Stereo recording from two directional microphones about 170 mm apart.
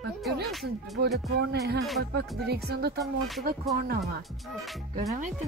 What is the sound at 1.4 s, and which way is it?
Speech, 70° right (ahead or behind).